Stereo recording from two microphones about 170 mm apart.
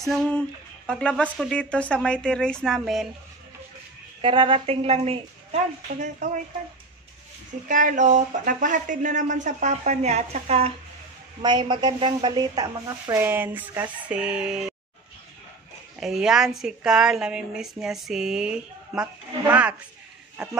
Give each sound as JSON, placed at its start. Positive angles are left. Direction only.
{"t": 0.1, "sound": "a woman's voice", "side_deg": 0}
{"t": 4.2, "sound": "a woman's voice", "side_deg": -30}
{"t": 7.6, "sound": "speech", "side_deg": -50}
{"t": 11.4, "sound": "speech", "side_deg": -25}
{"t": 16.0, "sound": "a woman's voice", "side_deg": -5}